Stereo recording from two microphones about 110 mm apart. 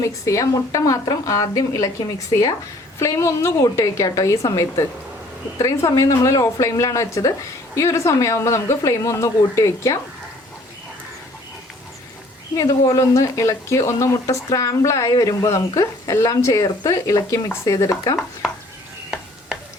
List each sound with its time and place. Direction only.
0.0 s a woman's voice: 30° left (ahead or behind)
12.5 s speech: 35° left (ahead or behind)